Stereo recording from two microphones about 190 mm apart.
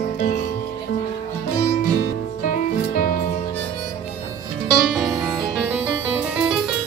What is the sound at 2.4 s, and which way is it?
Music, 45° left (ahead or behind).